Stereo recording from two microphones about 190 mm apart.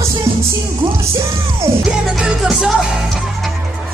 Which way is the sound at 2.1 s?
Centre (ahead or behind).